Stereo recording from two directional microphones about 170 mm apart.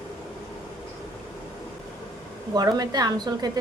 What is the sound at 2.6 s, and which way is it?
A woman's voice, 20° right (ahead or behind).